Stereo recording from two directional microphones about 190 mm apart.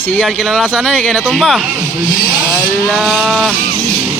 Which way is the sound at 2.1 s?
45° left (ahead or behind).